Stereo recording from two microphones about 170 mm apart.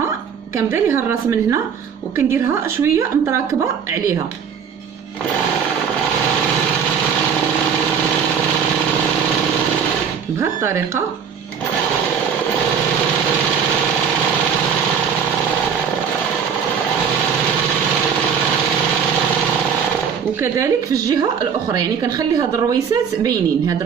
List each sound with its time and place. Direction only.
0.6 s a woman's voice: 15° right (ahead or behind)
2.8 s a woman's voice: 15° right (ahead or behind)
10.4 s a woman's voice: 15° right (ahead or behind)
20.3 s speech: 15° right (ahead or behind)